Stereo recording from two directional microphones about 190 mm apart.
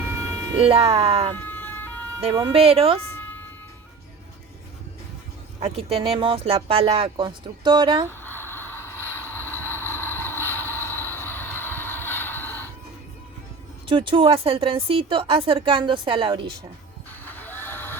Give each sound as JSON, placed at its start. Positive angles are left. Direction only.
{"t": 0.7, "sound": "speech", "side_deg": -30}
{"t": 1.4, "sound": "ambulance", "side_deg": 10}
{"t": 2.2, "sound": "speech", "side_deg": -25}
{"t": 5.5, "sound": "speech", "side_deg": -30}
{"t": 8.2, "sound": "a sound", "side_deg": 10}
{"t": 9.0, "sound": "vehicle", "side_deg": 10}
{"t": 13.8, "sound": "speech", "side_deg": -25}
{"t": 17.2, "sound": "a sound", "side_deg": 10}